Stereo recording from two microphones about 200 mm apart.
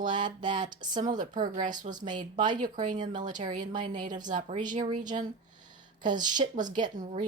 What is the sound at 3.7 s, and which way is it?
Speech, 40° right (ahead or behind).